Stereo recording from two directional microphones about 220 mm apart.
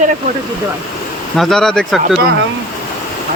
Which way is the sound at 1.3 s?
Centre (ahead or behind).